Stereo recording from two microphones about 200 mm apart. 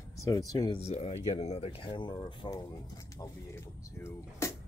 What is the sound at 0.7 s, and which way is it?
Speech, 30° left (ahead or behind).